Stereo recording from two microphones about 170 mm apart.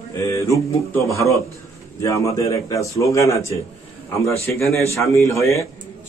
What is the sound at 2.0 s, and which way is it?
A man's voice, 20° left (ahead or behind).